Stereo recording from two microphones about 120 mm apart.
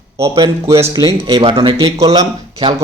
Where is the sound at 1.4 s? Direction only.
45° right (ahead or behind).